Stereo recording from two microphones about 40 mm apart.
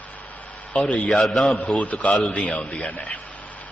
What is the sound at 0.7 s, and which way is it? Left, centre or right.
Speech, left.